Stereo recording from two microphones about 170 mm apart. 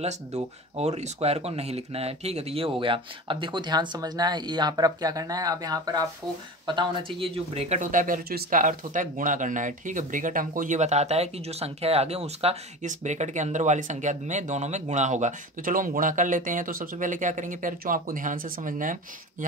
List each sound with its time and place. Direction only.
0.0 s speech: 40° right (ahead or behind)